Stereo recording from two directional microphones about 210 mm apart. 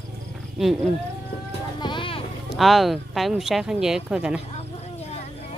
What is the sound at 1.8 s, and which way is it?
Music, 20° left (ahead or behind).